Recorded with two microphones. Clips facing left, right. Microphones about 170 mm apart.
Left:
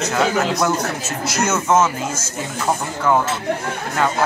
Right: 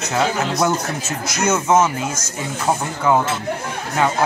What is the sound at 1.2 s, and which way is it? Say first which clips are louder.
Speech: even; 5° left (ahead or behind).